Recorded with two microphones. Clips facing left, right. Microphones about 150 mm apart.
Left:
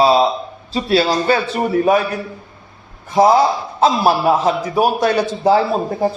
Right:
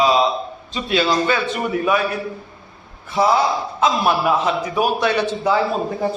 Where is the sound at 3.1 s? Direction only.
40° left (ahead or behind).